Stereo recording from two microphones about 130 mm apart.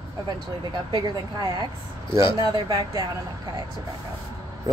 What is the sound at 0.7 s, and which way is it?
Speech, 35° right (ahead or behind).